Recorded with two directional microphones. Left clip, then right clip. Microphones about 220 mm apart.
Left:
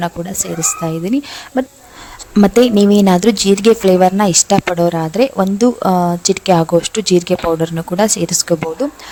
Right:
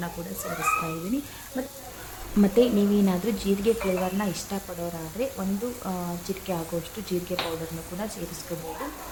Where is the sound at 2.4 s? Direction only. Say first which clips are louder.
Left 11 dB; 50° left (ahead or behind).